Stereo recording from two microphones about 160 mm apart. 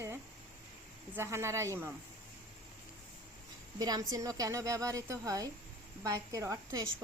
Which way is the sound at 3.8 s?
20° right (ahead or behind).